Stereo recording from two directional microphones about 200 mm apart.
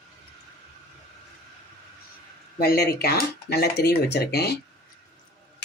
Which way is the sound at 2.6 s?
50° left (ahead or behind).